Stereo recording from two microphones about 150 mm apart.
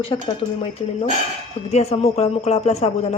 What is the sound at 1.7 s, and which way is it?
A woman's voice, 45° left (ahead or behind).